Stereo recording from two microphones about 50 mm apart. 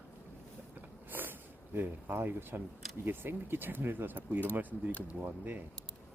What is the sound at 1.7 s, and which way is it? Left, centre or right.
Speech, right.